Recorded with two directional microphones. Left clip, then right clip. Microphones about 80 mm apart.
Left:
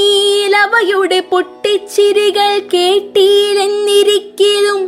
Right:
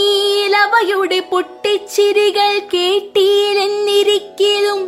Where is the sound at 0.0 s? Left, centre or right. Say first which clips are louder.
Left 3 dB; left.